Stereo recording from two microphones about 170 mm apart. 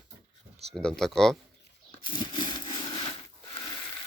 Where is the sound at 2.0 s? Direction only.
30° left (ahead or behind).